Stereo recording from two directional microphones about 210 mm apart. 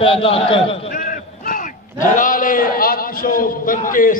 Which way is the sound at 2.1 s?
40° left (ahead or behind).